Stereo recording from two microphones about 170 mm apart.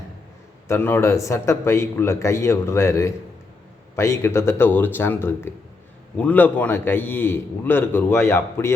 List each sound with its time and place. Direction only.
0.7 s a man's voice: 15° left (ahead or behind)